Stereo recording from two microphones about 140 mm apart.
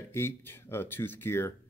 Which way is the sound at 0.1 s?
15° left (ahead or behind).